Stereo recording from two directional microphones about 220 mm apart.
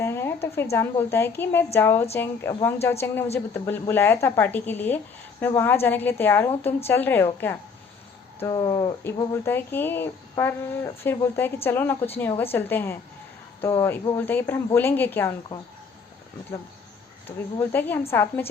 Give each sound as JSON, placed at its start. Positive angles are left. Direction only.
{"t": 0.0, "sound": "a sound", "side_deg": 10}
{"t": 0.4, "sound": "speech", "side_deg": 10}
{"t": 17.6, "sound": "speech", "side_deg": 10}